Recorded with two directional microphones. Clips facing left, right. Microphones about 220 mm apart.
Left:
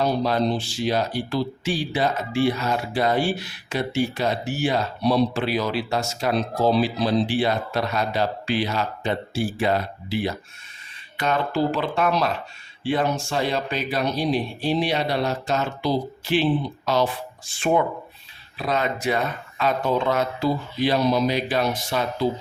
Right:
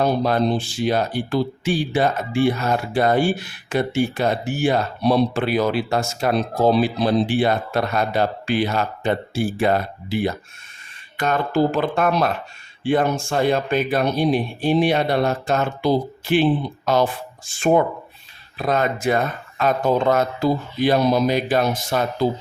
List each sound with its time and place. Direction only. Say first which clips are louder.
0.0 s speech: right 3 dB; 55° right (ahead or behind)